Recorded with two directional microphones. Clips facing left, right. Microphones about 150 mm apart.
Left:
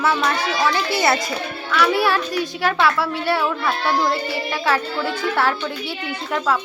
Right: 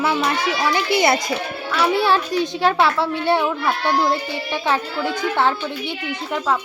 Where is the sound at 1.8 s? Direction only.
25° right (ahead or behind).